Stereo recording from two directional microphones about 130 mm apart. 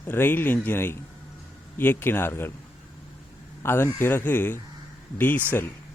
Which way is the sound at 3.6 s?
20° left (ahead or behind).